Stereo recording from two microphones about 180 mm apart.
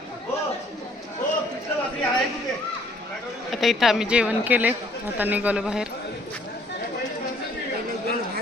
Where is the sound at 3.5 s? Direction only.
Centre (ahead or behind).